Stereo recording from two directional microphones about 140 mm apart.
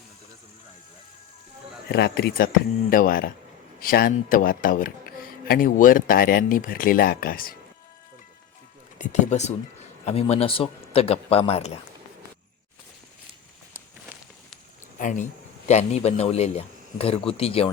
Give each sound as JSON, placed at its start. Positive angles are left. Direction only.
{"t": 2.1, "sound": "a man's voice", "side_deg": 90}
{"t": 9.0, "sound": "speech", "side_deg": 60}
{"t": 14.9, "sound": "speech", "side_deg": 65}